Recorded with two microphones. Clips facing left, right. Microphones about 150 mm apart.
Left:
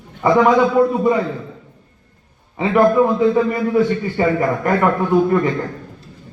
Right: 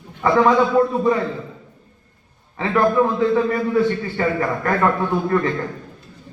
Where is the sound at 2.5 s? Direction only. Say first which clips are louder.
Left 4 dB; 15° left (ahead or behind).